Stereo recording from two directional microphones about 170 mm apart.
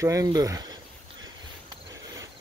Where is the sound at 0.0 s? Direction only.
20° right (ahead or behind).